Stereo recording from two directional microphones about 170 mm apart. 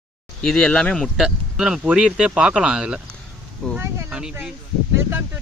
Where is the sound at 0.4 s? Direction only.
5° left (ahead or behind).